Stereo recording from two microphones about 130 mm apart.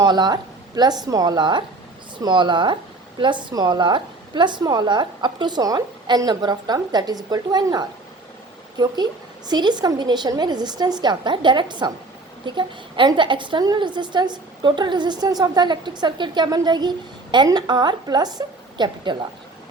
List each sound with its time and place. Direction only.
0.0 s a woman's voice: 35° right (ahead or behind)